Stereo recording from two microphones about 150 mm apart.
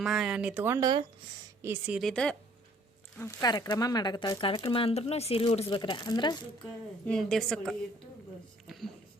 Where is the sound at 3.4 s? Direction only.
25° left (ahead or behind).